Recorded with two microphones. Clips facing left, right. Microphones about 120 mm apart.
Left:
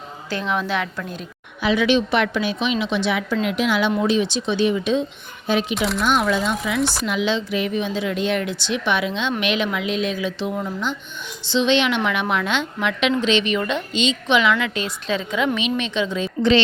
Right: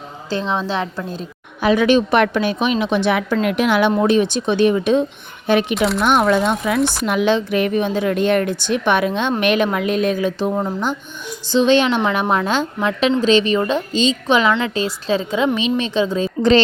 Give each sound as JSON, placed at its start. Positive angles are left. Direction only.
{"t": 0.3, "sound": "a woman's voice", "side_deg": -30}
{"t": 1.6, "sound": "a woman's voice", "side_deg": -45}
{"t": 5.7, "sound": "speech", "side_deg": 0}
{"t": 6.0, "sound": "speech", "side_deg": -60}
{"t": 6.7, "sound": "speech", "side_deg": 0}
{"t": 7.0, "sound": "a woman's voice", "side_deg": -50}